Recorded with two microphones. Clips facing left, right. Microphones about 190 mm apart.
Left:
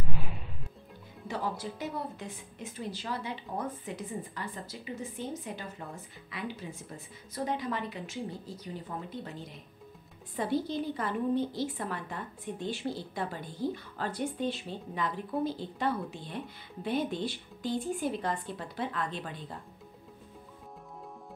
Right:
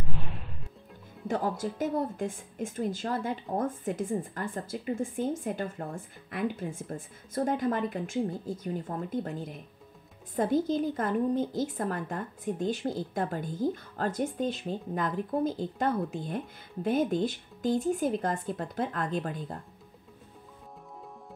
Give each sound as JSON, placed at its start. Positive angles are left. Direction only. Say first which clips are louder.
{"t": 0.1, "sound": "music", "louder": "even", "side_deg": 0}
{"t": 1.2, "sound": "a woman's voice", "louder": "right 5 dB", "side_deg": -45}